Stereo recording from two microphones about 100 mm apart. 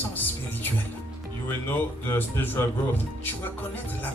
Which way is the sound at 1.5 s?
20° left (ahead or behind).